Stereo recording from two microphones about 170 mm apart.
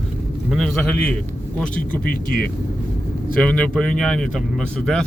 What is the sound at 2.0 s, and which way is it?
Speech, 60° left (ahead or behind).